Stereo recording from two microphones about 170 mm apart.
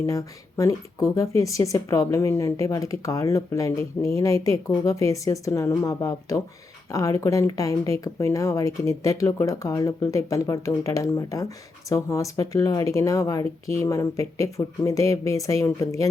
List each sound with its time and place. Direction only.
0.0 s speech: 20° left (ahead or behind)